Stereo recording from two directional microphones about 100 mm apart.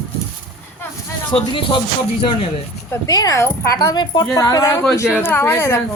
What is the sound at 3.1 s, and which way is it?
A woman's voice, 40° left (ahead or behind).